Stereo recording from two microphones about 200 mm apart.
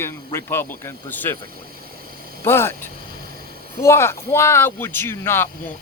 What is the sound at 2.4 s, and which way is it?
Speech, 10° left (ahead or behind).